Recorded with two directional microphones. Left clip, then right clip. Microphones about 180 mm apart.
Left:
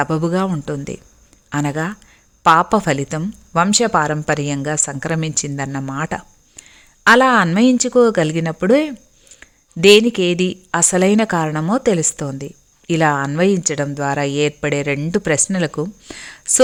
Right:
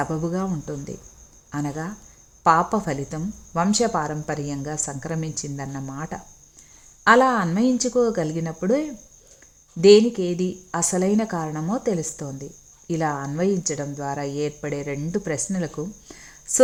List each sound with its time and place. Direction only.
0.0 s speech: 15° left (ahead or behind)
0.3 s a woman's voice: 25° left (ahead or behind)
7.9 s a woman's voice: 20° left (ahead or behind)
8.1 s a woman's voice: 30° left (ahead or behind)